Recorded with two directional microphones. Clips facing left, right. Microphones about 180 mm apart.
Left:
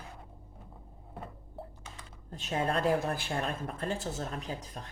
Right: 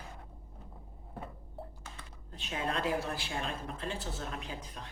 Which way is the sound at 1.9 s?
40° left (ahead or behind).